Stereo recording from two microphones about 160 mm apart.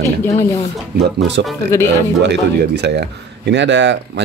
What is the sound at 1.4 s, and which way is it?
Speech, 90° right.